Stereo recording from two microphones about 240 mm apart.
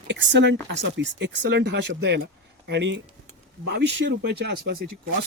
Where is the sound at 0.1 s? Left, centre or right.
Right.